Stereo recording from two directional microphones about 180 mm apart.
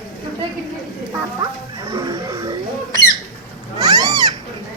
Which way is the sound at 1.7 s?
20° right (ahead or behind).